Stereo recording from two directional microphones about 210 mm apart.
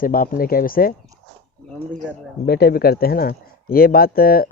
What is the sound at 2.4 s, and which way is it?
Speech, 50° left (ahead or behind).